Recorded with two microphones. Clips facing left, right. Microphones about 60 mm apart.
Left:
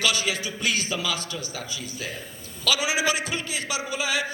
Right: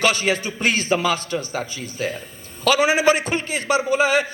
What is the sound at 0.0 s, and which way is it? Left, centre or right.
A man's voice, right.